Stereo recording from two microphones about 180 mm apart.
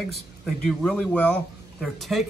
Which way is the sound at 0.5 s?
Centre (ahead or behind).